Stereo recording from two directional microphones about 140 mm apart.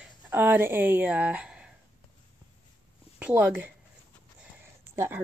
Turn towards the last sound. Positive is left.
turn(degrees=-20)  # may be behind; listen again after turning